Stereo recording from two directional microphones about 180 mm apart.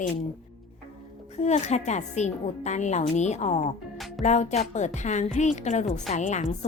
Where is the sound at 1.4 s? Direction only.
40° left (ahead or behind).